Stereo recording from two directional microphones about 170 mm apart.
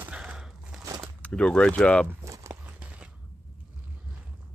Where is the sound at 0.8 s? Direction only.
20° right (ahead or behind).